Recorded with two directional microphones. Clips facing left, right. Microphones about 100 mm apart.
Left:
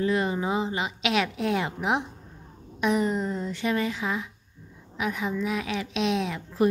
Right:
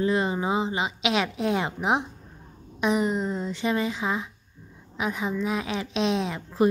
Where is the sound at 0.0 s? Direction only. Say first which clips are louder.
Right 1 dB; 25° right (ahead or behind).